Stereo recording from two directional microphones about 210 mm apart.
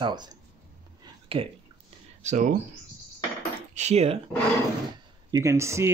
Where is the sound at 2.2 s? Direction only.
35° right (ahead or behind).